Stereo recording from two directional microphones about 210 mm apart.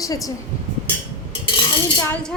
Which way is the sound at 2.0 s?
10° left (ahead or behind).